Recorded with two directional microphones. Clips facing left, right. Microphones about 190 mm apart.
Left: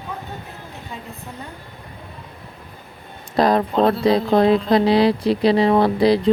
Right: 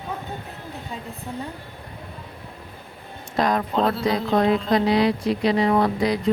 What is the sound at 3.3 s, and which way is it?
Speech, 35° left (ahead or behind).